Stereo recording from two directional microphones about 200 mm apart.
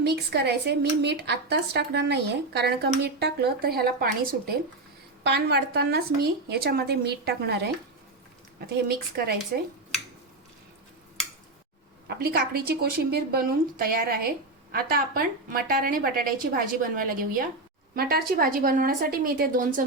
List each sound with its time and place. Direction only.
0.0 s a woman's voice: 55° right (ahead or behind)
5.2 s a woman's voice: 55° right (ahead or behind)
8.7 s a woman's voice: 50° right (ahead or behind)
12.0 s a woman's voice: 50° right (ahead or behind)